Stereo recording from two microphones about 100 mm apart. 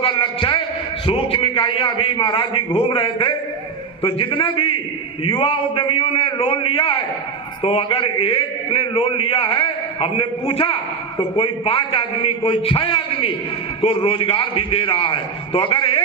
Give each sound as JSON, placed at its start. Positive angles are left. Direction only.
{"t": 0.0, "sound": "a man's voice", "side_deg": 60}